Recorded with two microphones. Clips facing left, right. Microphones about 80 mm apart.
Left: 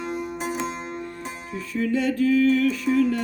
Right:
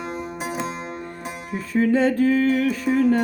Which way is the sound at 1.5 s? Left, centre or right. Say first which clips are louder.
Right 5 dB; right.